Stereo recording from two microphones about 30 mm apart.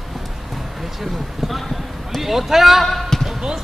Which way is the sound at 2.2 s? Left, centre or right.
Centre.